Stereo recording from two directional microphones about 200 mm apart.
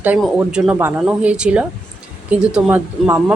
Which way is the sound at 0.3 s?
5° right (ahead or behind).